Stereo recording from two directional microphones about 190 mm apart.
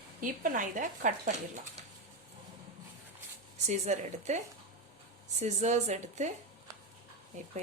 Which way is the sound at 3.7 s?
35° right (ahead or behind).